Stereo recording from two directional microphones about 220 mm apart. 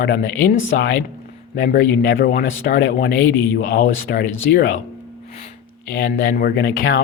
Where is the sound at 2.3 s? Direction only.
45° left (ahead or behind).